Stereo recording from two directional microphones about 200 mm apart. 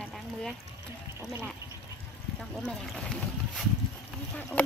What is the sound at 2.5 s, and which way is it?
Speech, 5° left (ahead or behind).